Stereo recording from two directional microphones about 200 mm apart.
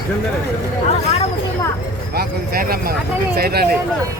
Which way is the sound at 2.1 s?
50° right (ahead or behind).